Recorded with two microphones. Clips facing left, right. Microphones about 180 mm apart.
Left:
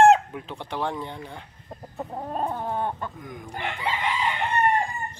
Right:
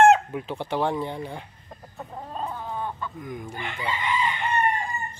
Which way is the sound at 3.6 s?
75° left (ahead or behind).